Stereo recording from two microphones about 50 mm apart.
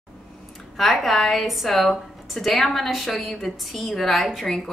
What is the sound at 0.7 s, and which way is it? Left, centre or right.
A woman's voice, centre.